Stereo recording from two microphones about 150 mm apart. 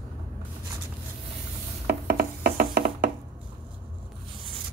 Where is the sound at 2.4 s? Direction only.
80° right.